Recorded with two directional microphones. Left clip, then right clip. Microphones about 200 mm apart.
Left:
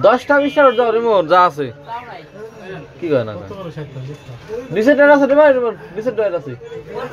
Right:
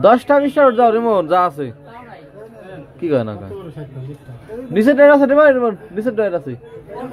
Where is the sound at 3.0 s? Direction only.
20° right (ahead or behind).